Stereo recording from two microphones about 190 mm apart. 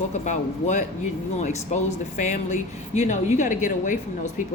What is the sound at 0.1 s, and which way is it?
A woman's voice, 40° left (ahead or behind).